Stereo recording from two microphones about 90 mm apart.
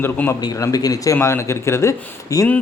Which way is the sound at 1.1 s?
30° left (ahead or behind).